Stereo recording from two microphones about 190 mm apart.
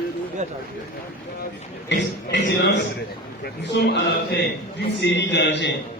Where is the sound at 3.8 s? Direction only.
60° left (ahead or behind).